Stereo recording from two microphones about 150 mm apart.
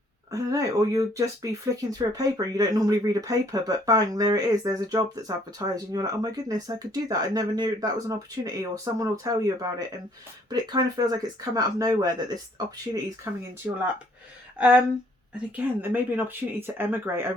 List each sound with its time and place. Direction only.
0.3 s speech: 20° right (ahead or behind)
15.5 s speech: 10° right (ahead or behind)